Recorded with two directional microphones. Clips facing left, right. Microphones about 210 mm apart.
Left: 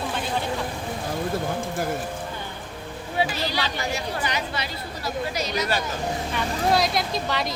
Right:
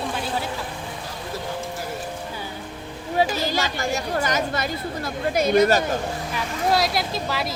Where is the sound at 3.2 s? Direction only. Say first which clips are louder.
Right 3 dB; 45° right (ahead or behind).